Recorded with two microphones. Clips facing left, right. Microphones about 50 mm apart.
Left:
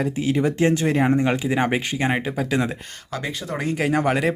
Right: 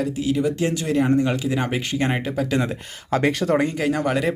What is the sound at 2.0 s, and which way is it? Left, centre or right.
Speech, centre.